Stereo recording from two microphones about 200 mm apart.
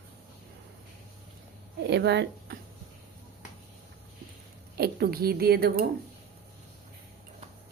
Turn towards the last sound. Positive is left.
turn(degrees=-50)  # may be behind; listen again after turning